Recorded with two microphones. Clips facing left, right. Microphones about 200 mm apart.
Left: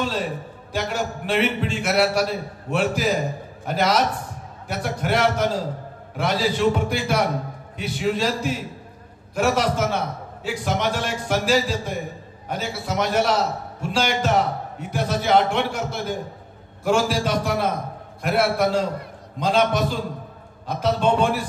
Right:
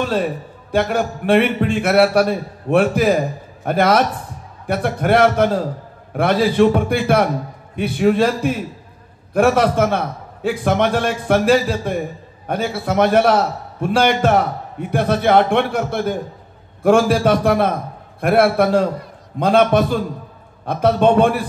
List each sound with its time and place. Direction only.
0.7 s a man's voice: 55° right (ahead or behind)